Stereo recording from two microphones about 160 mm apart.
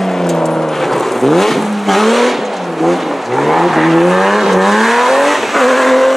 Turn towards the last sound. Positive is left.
turn(degrees=0)  # may be behind; listen again after turning